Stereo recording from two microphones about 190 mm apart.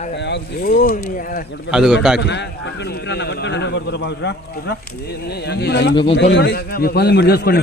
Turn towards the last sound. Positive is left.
turn(degrees=60)  # may be behind; listen again after turning